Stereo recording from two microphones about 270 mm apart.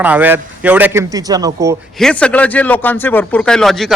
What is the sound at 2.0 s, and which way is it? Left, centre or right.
A man's voice, centre.